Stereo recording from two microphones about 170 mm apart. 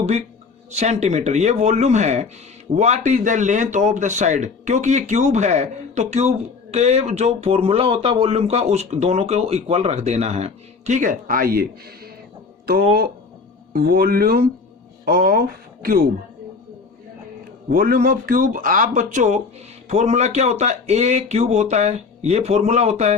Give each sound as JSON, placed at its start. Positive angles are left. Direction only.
{"t": 0.7, "sound": "a man's voice", "side_deg": -40}
{"t": 13.7, "sound": "speech", "side_deg": -60}
{"t": 17.7, "sound": "a man's voice", "side_deg": -60}